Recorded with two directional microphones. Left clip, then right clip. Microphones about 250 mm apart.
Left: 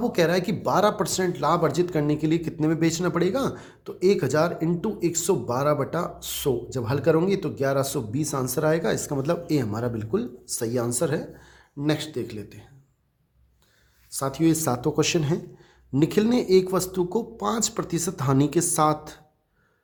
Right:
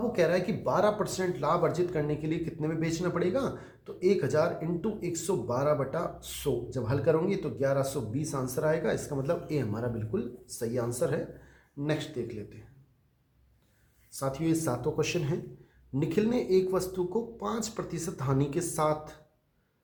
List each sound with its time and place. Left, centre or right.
0.1 s speech: left
14.1 s speech: left